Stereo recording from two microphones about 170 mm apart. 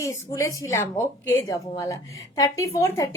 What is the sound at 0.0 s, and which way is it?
A woman's voice, 20° left (ahead or behind).